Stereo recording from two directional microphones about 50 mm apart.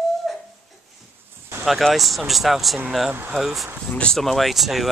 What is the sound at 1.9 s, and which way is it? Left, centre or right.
Speech, centre.